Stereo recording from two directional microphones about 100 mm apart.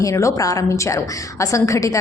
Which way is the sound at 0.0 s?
30° left (ahead or behind).